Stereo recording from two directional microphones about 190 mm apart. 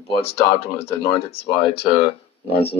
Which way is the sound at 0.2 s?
30° left (ahead or behind).